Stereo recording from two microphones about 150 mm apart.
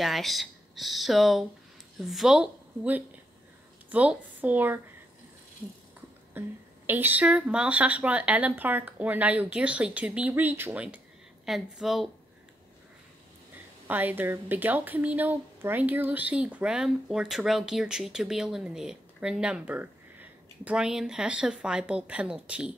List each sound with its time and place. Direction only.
0.0 s a woman's voice: centre (ahead or behind)
6.4 s a woman's voice: 15° right (ahead or behind)
13.8 s a woman's voice: 10° right (ahead or behind)